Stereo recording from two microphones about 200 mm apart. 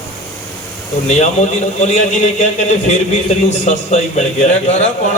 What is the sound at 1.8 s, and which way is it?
A man's voice, 35° left (ahead or behind).